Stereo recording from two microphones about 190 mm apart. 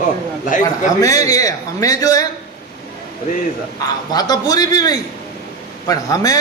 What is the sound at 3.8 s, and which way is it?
A man's voice, 20° left (ahead or behind).